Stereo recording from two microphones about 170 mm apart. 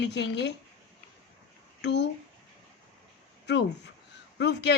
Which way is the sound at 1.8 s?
90° left.